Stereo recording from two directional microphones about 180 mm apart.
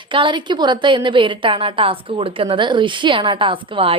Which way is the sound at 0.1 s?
25° right (ahead or behind).